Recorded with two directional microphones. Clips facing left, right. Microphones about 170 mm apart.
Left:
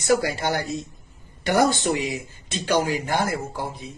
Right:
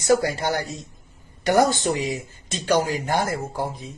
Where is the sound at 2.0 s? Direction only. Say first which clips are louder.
Right 1 dB; 40° right (ahead or behind).